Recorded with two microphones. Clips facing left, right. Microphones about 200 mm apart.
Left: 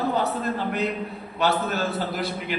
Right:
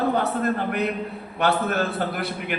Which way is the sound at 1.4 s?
60° right (ahead or behind).